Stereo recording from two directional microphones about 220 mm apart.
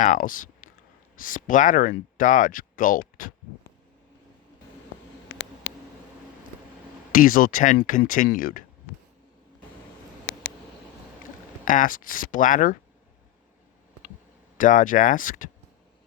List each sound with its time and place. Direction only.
0.0 s speech: 35° left (ahead or behind)
7.1 s speech: 40° left (ahead or behind)
11.6 s speech: 35° left (ahead or behind)
14.6 s speech: 35° left (ahead or behind)